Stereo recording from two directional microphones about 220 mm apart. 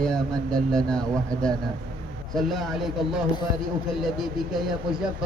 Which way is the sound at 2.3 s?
Centre (ahead or behind).